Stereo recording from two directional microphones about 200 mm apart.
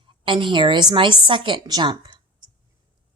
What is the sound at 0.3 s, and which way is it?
Speech, 25° right (ahead or behind).